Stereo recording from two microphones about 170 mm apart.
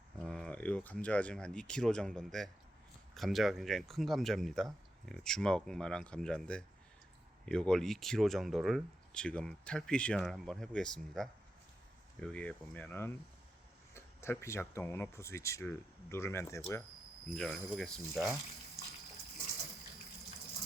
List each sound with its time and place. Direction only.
0.2 s speech: 5° left (ahead or behind)
17.3 s speech: centre (ahead or behind)